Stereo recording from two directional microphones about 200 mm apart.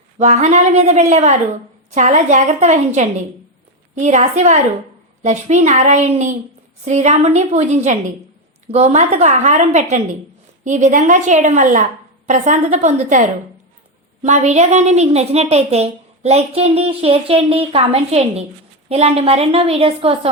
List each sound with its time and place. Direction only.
0.2 s a woman's voice: 35° right (ahead or behind)